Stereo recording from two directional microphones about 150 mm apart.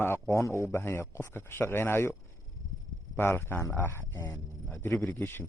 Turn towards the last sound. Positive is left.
turn(degrees=15)  # may be behind; listen again after turning